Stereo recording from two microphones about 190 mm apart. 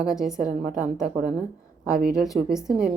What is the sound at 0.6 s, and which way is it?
Speech, 45° right (ahead or behind).